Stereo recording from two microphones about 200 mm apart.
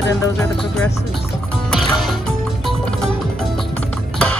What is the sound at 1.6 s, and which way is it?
Music, centre (ahead or behind).